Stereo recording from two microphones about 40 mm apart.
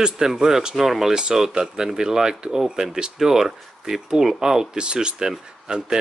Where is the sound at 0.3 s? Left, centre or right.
Centre.